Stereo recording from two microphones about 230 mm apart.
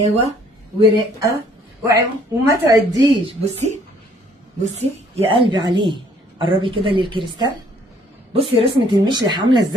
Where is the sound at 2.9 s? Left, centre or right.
Right.